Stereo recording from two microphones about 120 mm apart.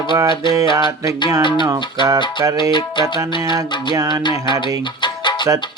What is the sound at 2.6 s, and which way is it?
Speech, 40° left (ahead or behind).